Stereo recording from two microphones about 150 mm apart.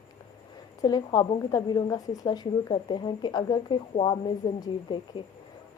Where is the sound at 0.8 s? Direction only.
25° left (ahead or behind).